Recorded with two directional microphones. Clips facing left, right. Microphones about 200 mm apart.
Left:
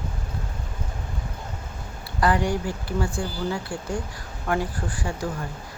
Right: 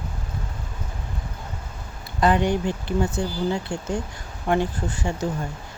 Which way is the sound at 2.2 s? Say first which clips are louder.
Right 3 dB; 20° right (ahead or behind).